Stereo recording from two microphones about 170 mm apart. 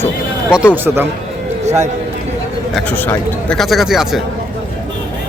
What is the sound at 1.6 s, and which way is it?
Speech, 45° right (ahead or behind).